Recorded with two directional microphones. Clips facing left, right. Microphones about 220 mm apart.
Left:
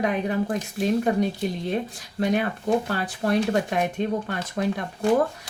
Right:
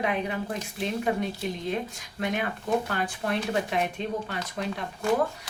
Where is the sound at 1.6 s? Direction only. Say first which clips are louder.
Left 3 dB; 35° left (ahead or behind).